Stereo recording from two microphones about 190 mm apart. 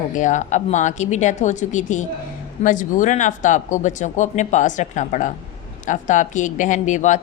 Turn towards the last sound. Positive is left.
turn(degrees=40)  # may be behind; listen again after turning